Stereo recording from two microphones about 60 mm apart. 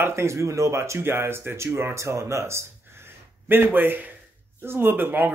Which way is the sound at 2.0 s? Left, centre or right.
Right.